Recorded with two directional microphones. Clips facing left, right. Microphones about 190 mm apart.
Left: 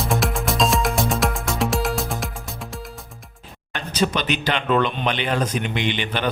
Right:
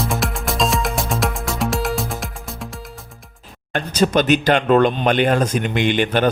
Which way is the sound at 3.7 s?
45° right (ahead or behind).